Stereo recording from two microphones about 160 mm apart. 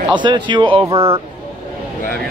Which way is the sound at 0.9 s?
15° right (ahead or behind).